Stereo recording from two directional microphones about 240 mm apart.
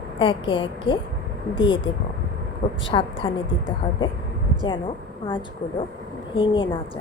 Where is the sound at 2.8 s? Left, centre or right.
Left.